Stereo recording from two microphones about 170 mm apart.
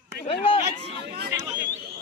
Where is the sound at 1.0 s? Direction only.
70° right (ahead or behind).